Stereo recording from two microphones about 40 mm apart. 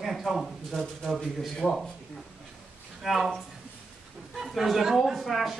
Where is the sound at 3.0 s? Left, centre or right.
Centre.